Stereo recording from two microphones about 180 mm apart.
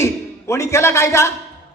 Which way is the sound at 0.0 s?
15° left (ahead or behind).